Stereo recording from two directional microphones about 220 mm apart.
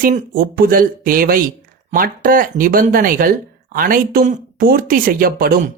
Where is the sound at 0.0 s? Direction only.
40° right (ahead or behind).